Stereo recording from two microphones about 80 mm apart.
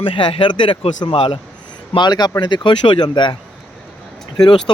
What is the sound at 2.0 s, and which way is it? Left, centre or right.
Speech, left.